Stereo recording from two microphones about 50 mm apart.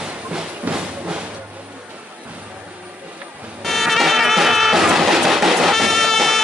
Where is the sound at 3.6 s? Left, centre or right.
Centre.